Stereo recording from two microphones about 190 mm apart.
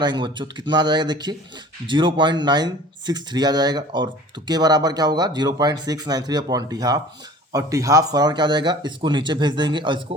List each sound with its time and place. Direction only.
0.0 s speech: 25° right (ahead or behind)